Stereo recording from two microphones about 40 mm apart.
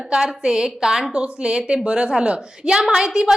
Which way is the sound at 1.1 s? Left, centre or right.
Right.